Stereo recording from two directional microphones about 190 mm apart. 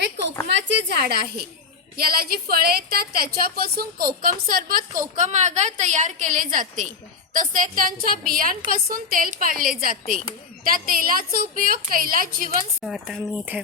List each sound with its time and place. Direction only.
0.0 s a sound: 65° right (ahead or behind)
0.4 s a woman's voice: 65° right (ahead or behind); by 12.5 s 50° right (ahead or behind)
12.8 s speech: centre (ahead or behind)